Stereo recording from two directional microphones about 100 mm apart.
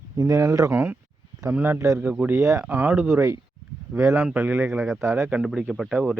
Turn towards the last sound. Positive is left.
turn(degrees=-5)  # may be behind; listen again after turning